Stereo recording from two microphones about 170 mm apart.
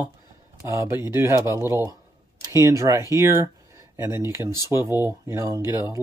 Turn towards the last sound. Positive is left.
turn(degrees=-15)  # may be behind; listen again after turning